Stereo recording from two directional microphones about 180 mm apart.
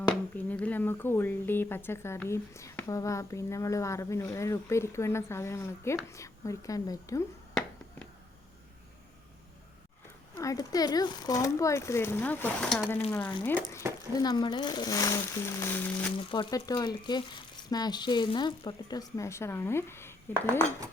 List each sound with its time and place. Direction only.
0.3 s speech: 10° left (ahead or behind)
10.3 s speech: 20° left (ahead or behind)
14.2 s speech: 25° left (ahead or behind)
16.1 s speech: 25° left (ahead or behind)